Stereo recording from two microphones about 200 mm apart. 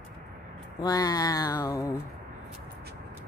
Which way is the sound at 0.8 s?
20° left (ahead or behind).